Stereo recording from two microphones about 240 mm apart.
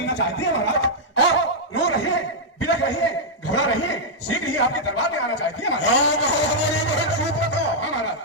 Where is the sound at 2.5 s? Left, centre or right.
Left.